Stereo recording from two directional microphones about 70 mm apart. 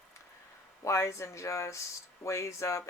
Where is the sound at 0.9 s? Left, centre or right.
Left.